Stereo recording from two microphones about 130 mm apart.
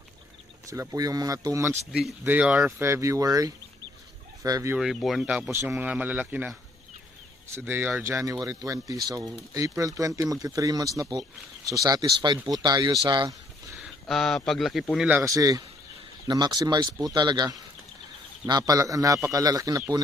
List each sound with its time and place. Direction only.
0.7 s speech: 25° right (ahead or behind)
1.9 s speech: centre (ahead or behind)
2.8 s speech: 20° right (ahead or behind)
4.4 s fowl: 25° right (ahead or behind)
4.7 s speech: centre (ahead or behind)
5.5 s speech: 20° right (ahead or behind)
7.5 s speech: 20° right (ahead or behind); by 13.4 s 35° right (ahead or behind)
13.7 s speech: centre (ahead or behind)
15.2 s speech: 25° right (ahead or behind)